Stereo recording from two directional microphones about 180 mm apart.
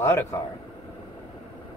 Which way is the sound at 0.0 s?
15° left (ahead or behind).